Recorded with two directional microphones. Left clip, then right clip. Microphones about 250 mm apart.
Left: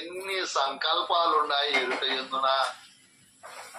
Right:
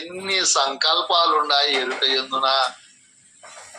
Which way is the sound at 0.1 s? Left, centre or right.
Right.